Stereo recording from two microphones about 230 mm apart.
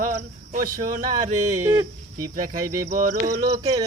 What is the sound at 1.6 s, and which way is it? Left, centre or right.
Speech, centre.